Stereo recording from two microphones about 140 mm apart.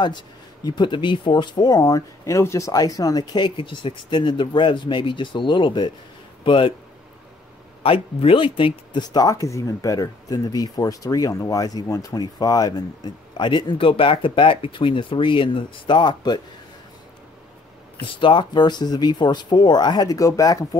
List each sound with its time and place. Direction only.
0.7 s speech: 35° left (ahead or behind)
7.8 s speech: 40° left (ahead or behind)
18.0 s speech: 35° left (ahead or behind)